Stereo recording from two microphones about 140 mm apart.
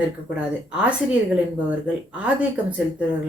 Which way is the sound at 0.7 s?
5° right (ahead or behind).